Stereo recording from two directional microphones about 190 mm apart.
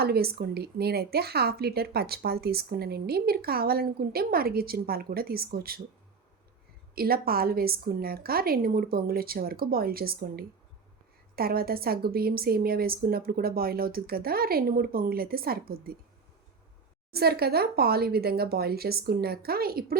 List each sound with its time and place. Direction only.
0.0 s a woman's voice: 55° right (ahead or behind)
6.9 s a woman's voice: 50° right (ahead or behind)
17.1 s a woman's voice: 55° right (ahead or behind)